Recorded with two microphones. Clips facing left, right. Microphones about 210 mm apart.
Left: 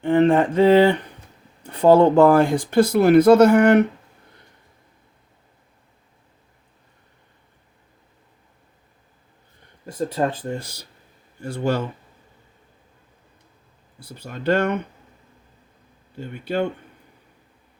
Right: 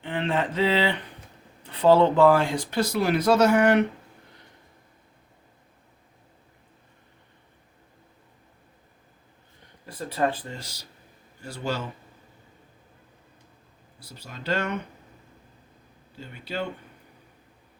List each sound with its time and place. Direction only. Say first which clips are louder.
0.0 s speech: left 11 dB; 45° left (ahead or behind)
10.4 s speech: left 10 dB; 55° left (ahead or behind)
14.0 s speech: left 11 dB; 55° left (ahead or behind)
16.1 s speech: left 8 dB; 55° left (ahead or behind)